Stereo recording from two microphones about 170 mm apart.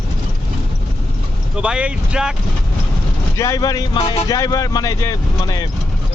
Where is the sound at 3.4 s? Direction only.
20° left (ahead or behind).